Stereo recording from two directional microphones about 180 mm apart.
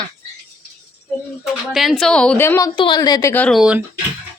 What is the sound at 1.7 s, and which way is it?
Speech, centre (ahead or behind).